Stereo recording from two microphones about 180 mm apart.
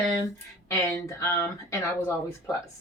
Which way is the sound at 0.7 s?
15° left (ahead or behind).